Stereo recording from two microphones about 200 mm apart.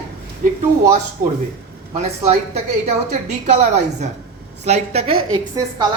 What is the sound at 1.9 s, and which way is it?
A woman's voice, 35° right (ahead or behind).